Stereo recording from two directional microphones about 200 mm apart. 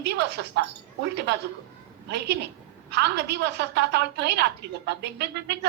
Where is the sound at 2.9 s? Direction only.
60° right (ahead or behind).